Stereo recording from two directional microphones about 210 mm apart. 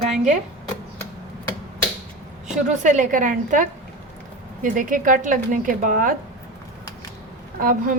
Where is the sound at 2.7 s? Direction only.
35° right (ahead or behind).